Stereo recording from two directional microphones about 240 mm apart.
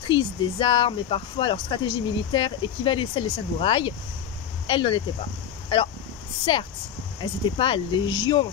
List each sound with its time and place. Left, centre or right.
0.1 s speech: left
7.2 s speech: left